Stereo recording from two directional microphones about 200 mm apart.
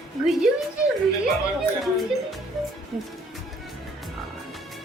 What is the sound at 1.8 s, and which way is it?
Speech, centre (ahead or behind).